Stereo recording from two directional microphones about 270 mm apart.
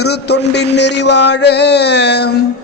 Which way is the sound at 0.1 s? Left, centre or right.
Left.